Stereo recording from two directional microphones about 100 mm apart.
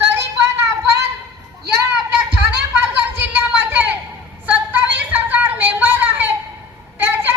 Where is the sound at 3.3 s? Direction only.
15° right (ahead or behind).